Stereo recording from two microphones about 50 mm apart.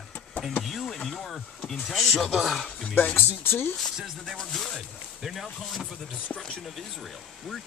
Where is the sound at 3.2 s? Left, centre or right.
Left.